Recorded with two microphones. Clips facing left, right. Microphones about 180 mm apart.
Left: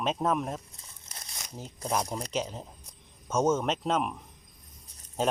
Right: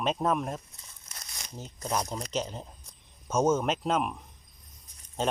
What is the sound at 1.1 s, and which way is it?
Crumpling, 25° left (ahead or behind).